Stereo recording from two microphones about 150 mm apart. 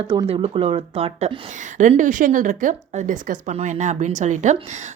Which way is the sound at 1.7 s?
55° right (ahead or behind).